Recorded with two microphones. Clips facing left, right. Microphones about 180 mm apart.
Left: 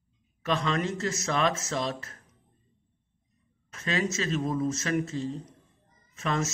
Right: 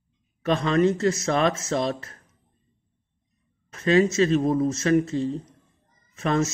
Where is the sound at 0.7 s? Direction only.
35° right (ahead or behind).